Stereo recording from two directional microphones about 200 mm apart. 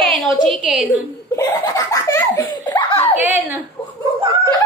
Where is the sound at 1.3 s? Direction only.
15° left (ahead or behind).